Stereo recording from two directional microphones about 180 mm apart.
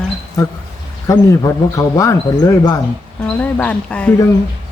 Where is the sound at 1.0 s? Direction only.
20° left (ahead or behind).